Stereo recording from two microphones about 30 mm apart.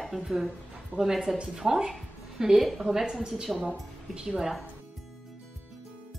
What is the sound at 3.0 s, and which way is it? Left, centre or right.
A woman's voice, right.